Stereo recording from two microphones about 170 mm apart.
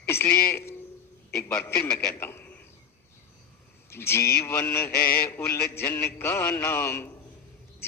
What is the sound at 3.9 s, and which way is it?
A man's voice, 15° left (ahead or behind).